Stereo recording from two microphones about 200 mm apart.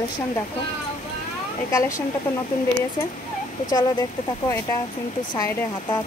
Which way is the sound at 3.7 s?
20° left (ahead or behind).